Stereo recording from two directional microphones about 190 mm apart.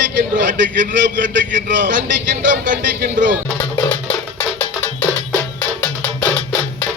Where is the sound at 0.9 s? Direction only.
45° right (ahead or behind).